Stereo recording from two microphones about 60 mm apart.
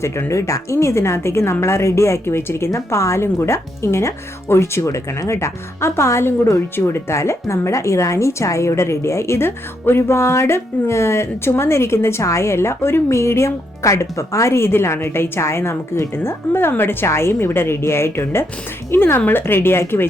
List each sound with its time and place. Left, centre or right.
0.3 s speech: left